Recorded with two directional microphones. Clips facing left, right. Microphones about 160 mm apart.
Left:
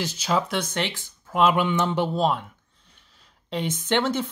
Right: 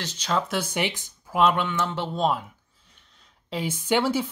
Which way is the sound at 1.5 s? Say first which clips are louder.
Left 3 dB; 15° left (ahead or behind).